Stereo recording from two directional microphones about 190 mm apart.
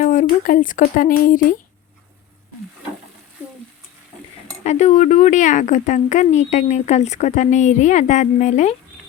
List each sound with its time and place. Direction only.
0.0 s speech: 45° left (ahead or behind)
4.6 s speech: 35° left (ahead or behind)